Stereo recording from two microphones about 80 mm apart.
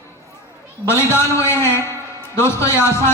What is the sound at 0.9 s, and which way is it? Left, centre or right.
A man's voice, left.